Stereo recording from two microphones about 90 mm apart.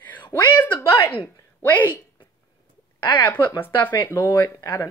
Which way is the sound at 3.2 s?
20° left (ahead or behind).